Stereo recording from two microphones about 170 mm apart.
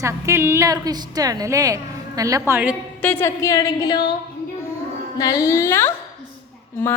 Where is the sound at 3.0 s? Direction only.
10° left (ahead or behind).